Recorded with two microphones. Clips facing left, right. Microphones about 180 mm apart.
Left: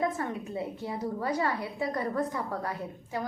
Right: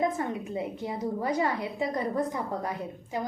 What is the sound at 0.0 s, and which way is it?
A woman's voice, 20° right (ahead or behind).